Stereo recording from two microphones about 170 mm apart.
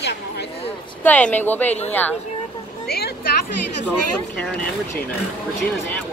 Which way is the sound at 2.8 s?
70° left (ahead or behind).